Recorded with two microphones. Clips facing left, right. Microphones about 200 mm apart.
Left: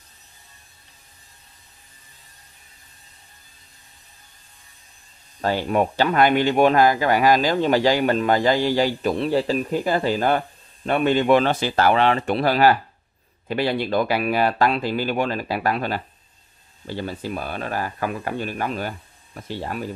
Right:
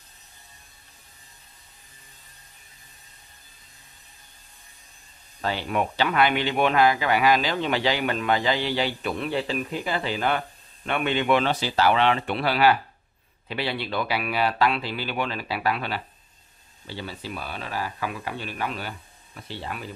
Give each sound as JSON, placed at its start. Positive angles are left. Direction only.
{"t": 5.4, "sound": "speech", "side_deg": 45}